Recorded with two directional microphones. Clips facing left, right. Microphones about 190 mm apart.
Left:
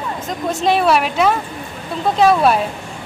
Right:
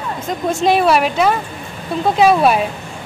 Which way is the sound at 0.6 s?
Centre (ahead or behind).